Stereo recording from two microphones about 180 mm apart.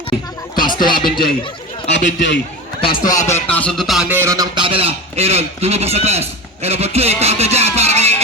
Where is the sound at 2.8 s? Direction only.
25° left (ahead or behind); by 8.1 s 35° right (ahead or behind).